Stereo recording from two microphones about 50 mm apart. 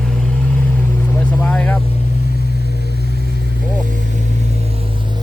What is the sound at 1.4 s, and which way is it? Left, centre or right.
Vehicle, left.